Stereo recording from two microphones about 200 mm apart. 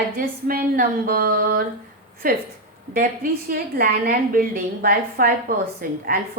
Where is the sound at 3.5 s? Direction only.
45° right (ahead or behind).